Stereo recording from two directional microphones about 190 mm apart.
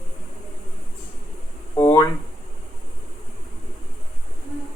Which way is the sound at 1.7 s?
30° left (ahead or behind).